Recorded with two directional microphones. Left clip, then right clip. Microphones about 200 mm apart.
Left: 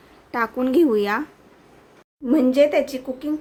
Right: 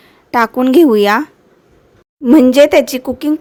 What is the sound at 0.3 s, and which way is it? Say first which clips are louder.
Speech: right 10 dB; 50° right (ahead or behind).